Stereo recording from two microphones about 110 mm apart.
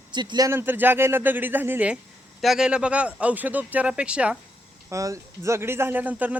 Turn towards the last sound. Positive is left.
turn(degrees=-15)  # may be behind; listen again after turning